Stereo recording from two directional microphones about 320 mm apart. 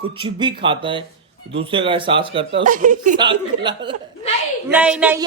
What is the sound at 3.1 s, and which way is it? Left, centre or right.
Speech, centre.